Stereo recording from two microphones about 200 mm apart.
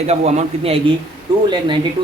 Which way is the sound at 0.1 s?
35° right (ahead or behind).